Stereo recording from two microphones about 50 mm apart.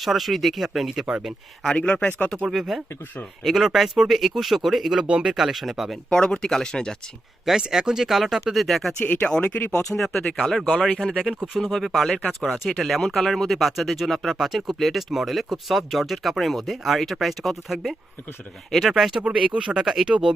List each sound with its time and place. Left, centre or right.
0.0 s speech: centre
1.7 s speech: left
2.5 s speech: centre
4.9 s speech: centre
5.3 s speech: centre
6.1 s speech: centre
7.5 s speech: centre
9.0 s speech: left
9.9 s speech: centre
10.7 s speech: left
11.2 s speech: centre
19.2 s speech: centre
20.1 s speech: right